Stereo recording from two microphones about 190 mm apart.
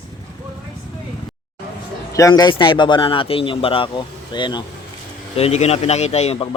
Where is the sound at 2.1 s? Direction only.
20° left (ahead or behind).